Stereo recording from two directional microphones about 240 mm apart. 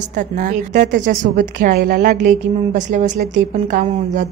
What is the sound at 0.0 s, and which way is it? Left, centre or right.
A woman's voice, right.